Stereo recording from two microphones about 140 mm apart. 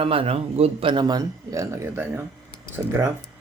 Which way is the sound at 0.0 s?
40° right (ahead or behind).